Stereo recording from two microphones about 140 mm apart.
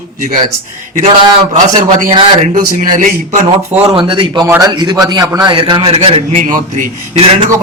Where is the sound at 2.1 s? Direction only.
45° right (ahead or behind).